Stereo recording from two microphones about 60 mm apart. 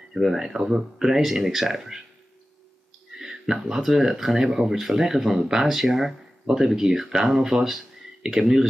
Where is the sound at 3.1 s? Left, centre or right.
Centre.